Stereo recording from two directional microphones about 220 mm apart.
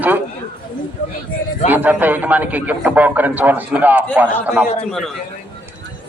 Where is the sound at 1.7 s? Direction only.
10° right (ahead or behind).